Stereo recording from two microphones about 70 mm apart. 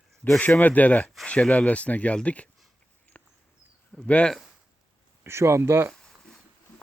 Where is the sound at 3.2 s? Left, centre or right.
Centre.